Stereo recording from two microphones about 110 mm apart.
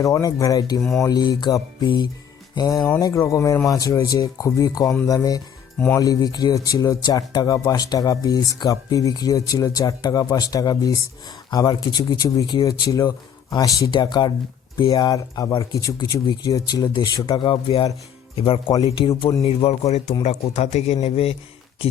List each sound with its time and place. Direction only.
0.0 s speech: 30° left (ahead or behind)
0.8 s speech: 5° left (ahead or behind)
1.0 s speech: 35° left (ahead or behind)
3.0 s speech: 25° left (ahead or behind); by 19.3 s 50° left (ahead or behind)
19.4 s a man's voice: 65° left (ahead or behind)
20.2 s speech: 90° left